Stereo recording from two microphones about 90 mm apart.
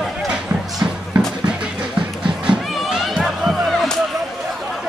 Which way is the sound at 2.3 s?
5° right (ahead or behind).